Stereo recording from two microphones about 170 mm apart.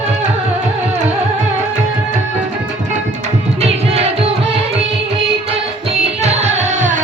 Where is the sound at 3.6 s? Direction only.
35° right (ahead or behind).